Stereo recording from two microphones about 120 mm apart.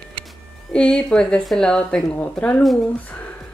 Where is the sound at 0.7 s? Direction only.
5° left (ahead or behind).